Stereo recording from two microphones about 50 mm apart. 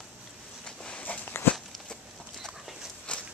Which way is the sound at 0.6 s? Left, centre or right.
Centre.